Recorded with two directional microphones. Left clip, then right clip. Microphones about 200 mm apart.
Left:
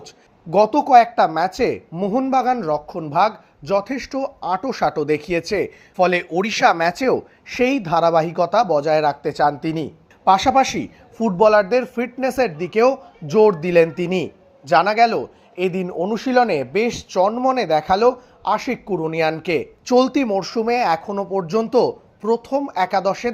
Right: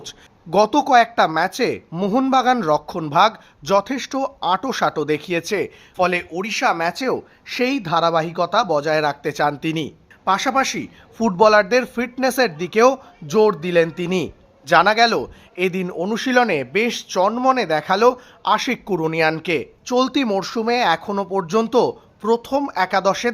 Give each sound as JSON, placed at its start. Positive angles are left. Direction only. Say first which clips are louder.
{"t": 0.5, "sound": "a man's voice", "louder": "left 2 dB", "side_deg": -5}
{"t": 1.9, "sound": "a man's voice", "louder": "right 1 dB", "side_deg": -20}
{"t": 2.3, "sound": "a man's voice", "louder": "right 3 dB", "side_deg": -10}
{"t": 6.3, "sound": "speech", "louder": "left 4 dB", "side_deg": 15}
{"t": 10.2, "sound": "a man's voice", "louder": "left 4 dB", "side_deg": 10}
{"t": 11.2, "sound": "a man's voice", "louder": "even", "side_deg": -10}